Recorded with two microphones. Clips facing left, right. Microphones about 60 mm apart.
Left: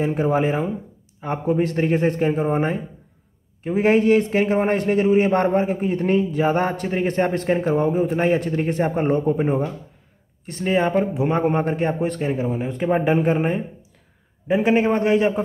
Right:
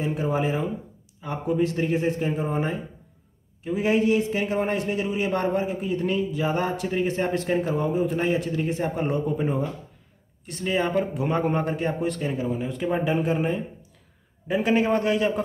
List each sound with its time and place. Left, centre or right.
0.0 s a man's voice: left
14.5 s a man's voice: left